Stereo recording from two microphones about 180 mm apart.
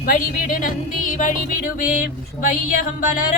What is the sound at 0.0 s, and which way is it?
Music, 50° left (ahead or behind).